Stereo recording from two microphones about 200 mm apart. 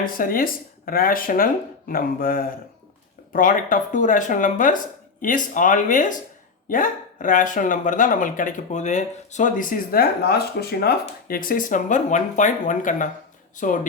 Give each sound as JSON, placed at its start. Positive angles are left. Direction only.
{"t": 0.0, "sound": "speech", "side_deg": 45}